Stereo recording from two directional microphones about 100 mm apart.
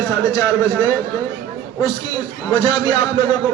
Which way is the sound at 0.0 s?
40° left (ahead or behind).